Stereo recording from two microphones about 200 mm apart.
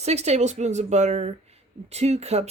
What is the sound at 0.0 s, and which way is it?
Speech, 35° right (ahead or behind).